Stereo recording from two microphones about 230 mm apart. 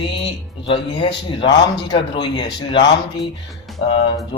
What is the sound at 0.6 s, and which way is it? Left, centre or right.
Speech, left.